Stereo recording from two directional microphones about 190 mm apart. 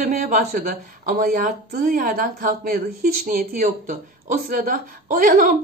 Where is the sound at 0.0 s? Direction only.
45° right (ahead or behind).